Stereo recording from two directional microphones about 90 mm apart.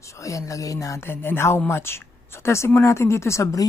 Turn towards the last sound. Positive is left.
turn(degrees=35)  # may be behind; listen again after turning